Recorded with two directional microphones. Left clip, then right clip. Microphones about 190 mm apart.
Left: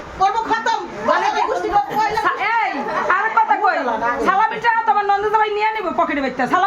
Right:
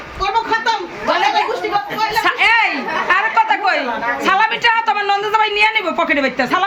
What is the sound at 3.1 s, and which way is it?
Chatter, 25° right (ahead or behind).